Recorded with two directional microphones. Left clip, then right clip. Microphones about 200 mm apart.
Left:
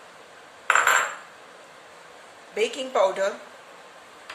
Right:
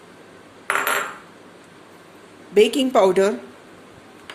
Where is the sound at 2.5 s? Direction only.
40° right (ahead or behind).